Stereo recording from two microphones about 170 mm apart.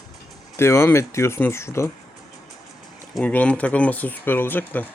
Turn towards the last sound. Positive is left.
turn(degrees=10)  # may be behind; listen again after turning